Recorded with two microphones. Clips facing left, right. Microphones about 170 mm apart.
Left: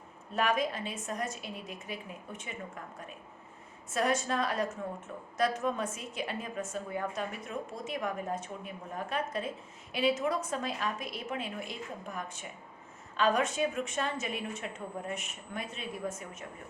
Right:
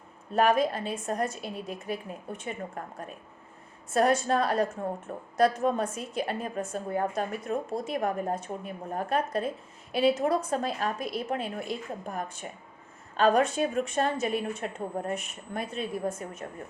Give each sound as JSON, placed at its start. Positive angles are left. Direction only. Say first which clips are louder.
{"t": 0.3, "sound": "a woman's voice", "louder": "right 6 dB", "side_deg": -35}
{"t": 3.8, "sound": "a woman's voice", "louder": "right 6 dB", "side_deg": -35}